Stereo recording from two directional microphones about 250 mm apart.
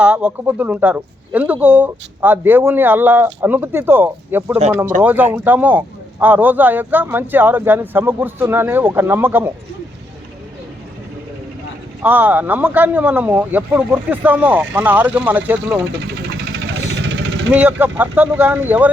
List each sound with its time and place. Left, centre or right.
0.0 s speech: centre
12.0 s speech: centre
17.1 s vehicle: right
17.5 s speech: centre